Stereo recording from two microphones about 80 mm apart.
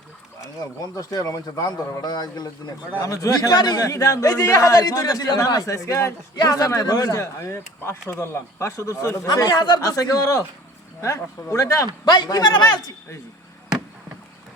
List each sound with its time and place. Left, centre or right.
0.9 s a man's voice: left
3.0 s a man's voice: left
6.3 s a man's voice: left
9.5 s a man's voice: left
9.8 s a man's voice: left
12.0 s a man's voice: left